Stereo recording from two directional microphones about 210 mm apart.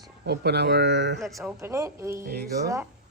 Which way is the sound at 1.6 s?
10° right (ahead or behind).